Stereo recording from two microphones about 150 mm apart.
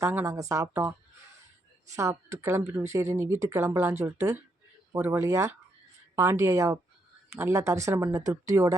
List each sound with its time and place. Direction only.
0.0 s speech: 15° right (ahead or behind)
2.0 s speech: 20° right (ahead or behind)